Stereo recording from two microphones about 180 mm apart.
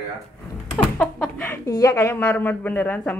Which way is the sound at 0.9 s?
10° left (ahead or behind).